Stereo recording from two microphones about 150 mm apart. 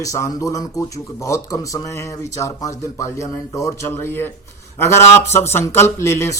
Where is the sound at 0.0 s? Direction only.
20° left (ahead or behind).